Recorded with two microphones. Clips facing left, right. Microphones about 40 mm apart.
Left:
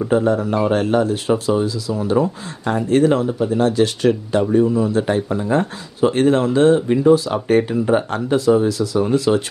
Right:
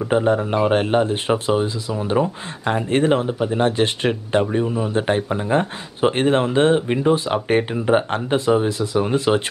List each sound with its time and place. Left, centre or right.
0.1 s speech: right